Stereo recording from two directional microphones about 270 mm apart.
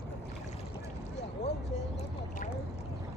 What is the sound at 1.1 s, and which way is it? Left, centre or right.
Boat, left.